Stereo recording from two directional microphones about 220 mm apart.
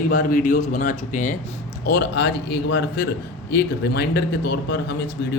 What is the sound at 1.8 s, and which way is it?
Speech, 50° left (ahead or behind).